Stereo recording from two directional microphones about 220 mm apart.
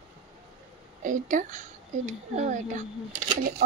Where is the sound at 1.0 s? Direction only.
35° right (ahead or behind).